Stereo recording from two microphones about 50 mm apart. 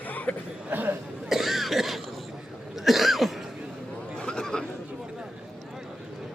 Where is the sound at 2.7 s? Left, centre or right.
Centre.